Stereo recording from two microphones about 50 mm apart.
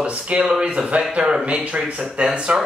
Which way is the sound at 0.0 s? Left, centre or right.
Right.